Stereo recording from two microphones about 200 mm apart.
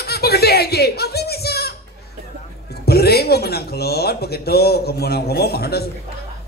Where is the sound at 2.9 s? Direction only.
50° left (ahead or behind).